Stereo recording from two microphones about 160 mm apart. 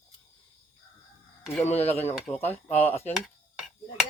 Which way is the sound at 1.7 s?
40° left (ahead or behind).